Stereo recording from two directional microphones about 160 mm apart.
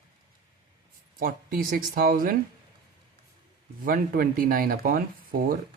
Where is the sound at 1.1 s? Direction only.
60° right (ahead or behind).